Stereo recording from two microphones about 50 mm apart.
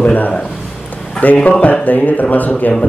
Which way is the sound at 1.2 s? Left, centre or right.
Left.